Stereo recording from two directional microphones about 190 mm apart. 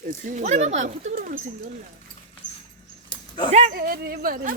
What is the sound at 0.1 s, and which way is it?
Speech, 40° right (ahead or behind).